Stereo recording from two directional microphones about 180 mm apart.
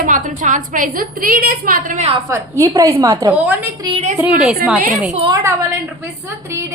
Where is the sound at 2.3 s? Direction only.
15° right (ahead or behind).